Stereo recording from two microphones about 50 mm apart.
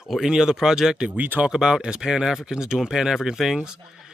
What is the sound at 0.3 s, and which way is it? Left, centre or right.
Speech, centre.